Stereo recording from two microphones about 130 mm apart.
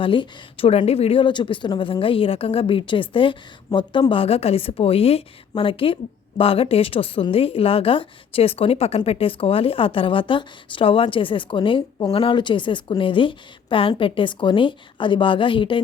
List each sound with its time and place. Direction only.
0.0 s a woman's voice: 40° left (ahead or behind)